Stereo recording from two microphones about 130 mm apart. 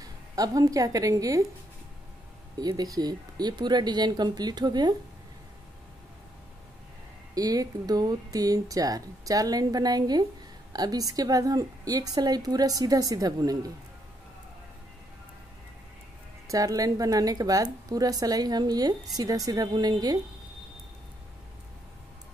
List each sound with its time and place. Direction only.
0.0 s speech: 30° right (ahead or behind)
2.6 s speech: 30° right (ahead or behind)
7.3 s a woman's voice: 30° right (ahead or behind)
16.4 s a woman's voice: 25° right (ahead or behind)